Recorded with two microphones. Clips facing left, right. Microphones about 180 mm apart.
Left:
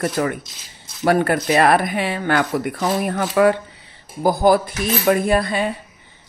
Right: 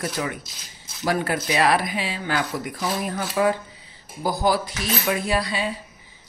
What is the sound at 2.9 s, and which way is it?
Speech, 55° left (ahead or behind).